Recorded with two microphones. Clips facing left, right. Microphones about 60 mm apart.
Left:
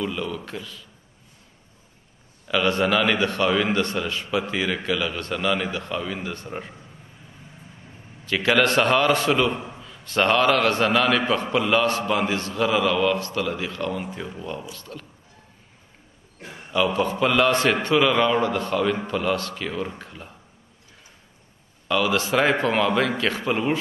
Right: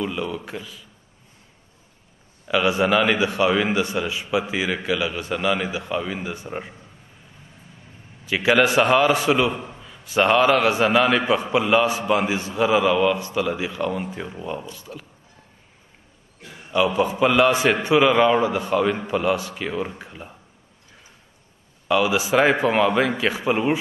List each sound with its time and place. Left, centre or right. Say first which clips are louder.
0.0 s a man's voice: right 1 dB; centre
2.4 s a man's voice: right 2 dB; centre
8.3 s a man's voice: right 2 dB; centre
16.3 s a sound: left 2 dB; left
16.7 s a man's voice: right 2 dB; centre
21.8 s a man's voice: right 2 dB; centre